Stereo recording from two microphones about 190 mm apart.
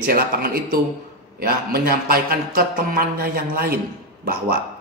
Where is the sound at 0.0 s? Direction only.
50° right (ahead or behind).